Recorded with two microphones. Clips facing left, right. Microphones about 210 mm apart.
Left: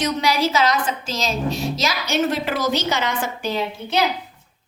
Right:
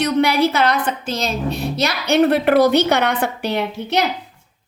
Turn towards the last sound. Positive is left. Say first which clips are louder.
# right 3 dB
turn(degrees=-65)  # may be behind; listen again after turning